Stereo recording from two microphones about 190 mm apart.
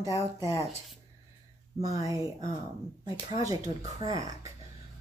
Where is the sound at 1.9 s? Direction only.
15° right (ahead or behind).